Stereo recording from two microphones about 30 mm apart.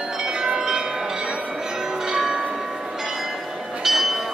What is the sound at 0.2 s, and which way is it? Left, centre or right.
Bell, right.